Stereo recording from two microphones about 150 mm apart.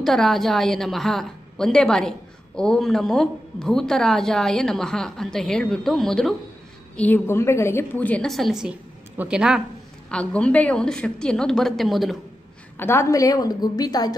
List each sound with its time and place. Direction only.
0.0 s a woman's voice: centre (ahead or behind)
7.0 s a woman's voice: 15° left (ahead or behind); by 9.6 s 5° right (ahead or behind)
10.1 s a woman's voice: 5° left (ahead or behind)
12.7 s a woman's voice: 15° left (ahead or behind)